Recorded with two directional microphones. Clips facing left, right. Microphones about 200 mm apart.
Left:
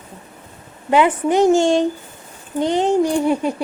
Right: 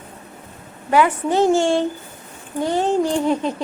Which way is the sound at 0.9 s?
20° left (ahead or behind).